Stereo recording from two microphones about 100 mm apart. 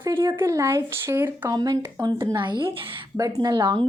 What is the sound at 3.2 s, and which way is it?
Speech, 40° right (ahead or behind).